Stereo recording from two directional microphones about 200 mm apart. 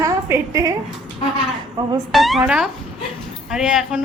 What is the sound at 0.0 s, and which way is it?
Speech, 15° right (ahead or behind).